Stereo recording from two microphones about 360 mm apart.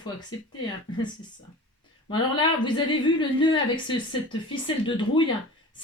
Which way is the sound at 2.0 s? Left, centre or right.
Centre.